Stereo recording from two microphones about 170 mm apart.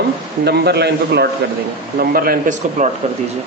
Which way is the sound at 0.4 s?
75° right (ahead or behind).